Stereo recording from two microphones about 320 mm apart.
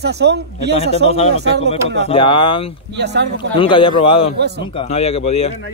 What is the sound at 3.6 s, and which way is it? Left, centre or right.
Speech, centre.